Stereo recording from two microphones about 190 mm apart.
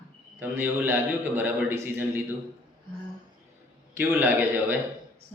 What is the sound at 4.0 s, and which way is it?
Speech, 10° right (ahead or behind).